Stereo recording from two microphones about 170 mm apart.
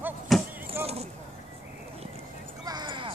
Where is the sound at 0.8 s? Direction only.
35° right (ahead or behind).